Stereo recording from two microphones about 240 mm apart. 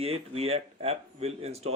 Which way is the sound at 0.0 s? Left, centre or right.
Right.